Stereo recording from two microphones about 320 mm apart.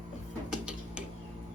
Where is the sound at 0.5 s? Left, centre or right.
Centre.